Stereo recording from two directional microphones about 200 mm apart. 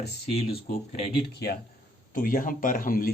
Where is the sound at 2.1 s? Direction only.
45° left (ahead or behind).